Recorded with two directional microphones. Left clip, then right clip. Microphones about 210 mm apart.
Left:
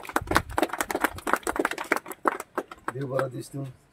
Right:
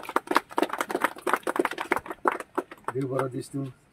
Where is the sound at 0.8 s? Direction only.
35° left (ahead or behind).